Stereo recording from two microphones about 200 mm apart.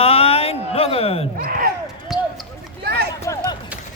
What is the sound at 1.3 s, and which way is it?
Speech, 45° right (ahead or behind).